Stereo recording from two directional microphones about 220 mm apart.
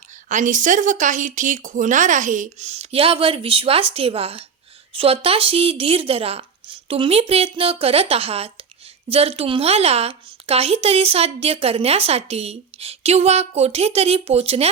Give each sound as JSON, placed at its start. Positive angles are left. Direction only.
{"t": 0.3, "sound": "a woman's voice", "side_deg": -35}